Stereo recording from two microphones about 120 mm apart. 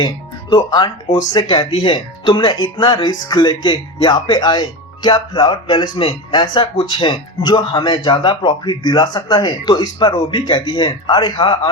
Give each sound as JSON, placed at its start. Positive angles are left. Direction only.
{"t": 0.5, "sound": "speech", "side_deg": 35}